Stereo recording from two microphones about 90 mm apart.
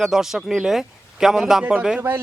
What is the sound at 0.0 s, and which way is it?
A man's voice, 5° right (ahead or behind).